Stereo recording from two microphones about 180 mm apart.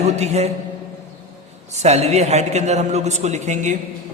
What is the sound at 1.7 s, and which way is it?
A man's voice, 40° right (ahead or behind).